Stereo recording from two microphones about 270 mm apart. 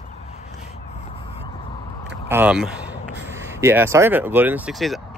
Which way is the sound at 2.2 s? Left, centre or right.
Centre.